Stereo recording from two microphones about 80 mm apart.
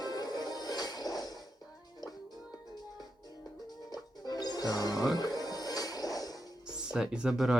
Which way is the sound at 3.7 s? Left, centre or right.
Left.